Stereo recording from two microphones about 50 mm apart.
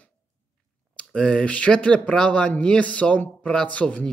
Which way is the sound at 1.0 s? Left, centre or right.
Centre.